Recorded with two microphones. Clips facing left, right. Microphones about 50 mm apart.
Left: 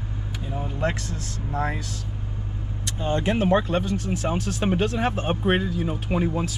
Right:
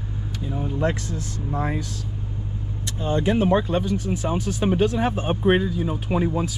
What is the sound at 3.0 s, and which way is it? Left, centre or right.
Speech, left.